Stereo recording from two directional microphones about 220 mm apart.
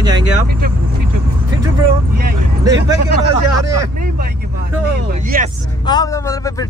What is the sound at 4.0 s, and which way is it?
Speech, 40° right (ahead or behind).